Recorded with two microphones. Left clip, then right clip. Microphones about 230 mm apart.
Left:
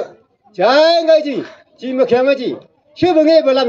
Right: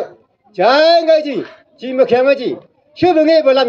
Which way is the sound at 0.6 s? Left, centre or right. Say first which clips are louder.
Right 1 dB; right.